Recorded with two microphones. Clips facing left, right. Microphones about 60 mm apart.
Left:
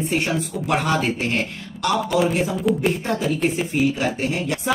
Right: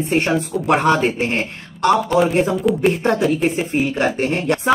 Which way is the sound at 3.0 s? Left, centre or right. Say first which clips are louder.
Right 6 dB; right.